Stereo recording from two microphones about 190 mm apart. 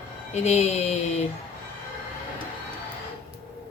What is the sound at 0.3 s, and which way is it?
Speech, 35° left (ahead or behind).